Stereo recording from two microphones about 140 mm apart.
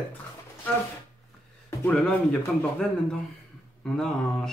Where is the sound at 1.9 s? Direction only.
5° left (ahead or behind).